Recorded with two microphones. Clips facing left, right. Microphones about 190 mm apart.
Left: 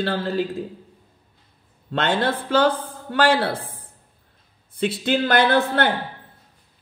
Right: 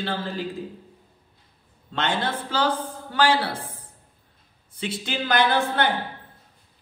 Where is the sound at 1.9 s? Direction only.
60° left (ahead or behind).